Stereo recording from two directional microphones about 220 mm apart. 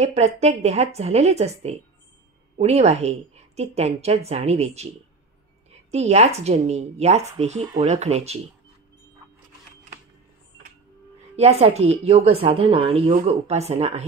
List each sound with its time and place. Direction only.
0.0 s a woman's voice: 30° right (ahead or behind)
11.3 s a woman's voice: 30° right (ahead or behind)